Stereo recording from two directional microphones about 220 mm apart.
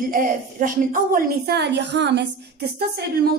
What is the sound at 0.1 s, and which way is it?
A woman's voice, 40° right (ahead or behind).